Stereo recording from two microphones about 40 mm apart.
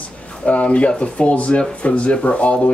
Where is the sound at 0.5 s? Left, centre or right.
Left.